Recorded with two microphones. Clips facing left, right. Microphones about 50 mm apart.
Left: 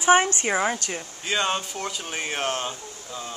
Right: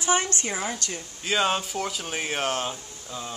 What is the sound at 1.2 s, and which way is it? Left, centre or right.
Speech, centre.